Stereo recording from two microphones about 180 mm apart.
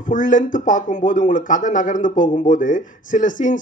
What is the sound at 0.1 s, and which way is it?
Speech, 45° left (ahead or behind).